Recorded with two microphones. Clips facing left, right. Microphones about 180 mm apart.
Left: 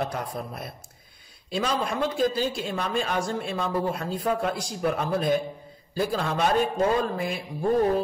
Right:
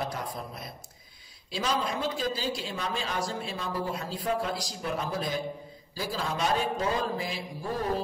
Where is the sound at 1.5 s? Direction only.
50° left (ahead or behind).